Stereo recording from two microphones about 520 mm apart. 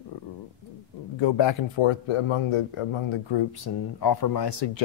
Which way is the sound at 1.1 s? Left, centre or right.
Left.